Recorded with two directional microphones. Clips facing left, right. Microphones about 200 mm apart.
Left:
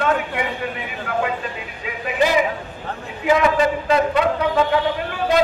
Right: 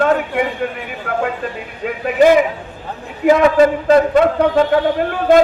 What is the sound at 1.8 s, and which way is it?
A man's voice, 50° right (ahead or behind).